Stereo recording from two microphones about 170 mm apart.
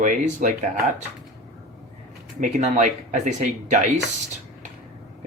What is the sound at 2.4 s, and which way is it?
Speech, 45° right (ahead or behind).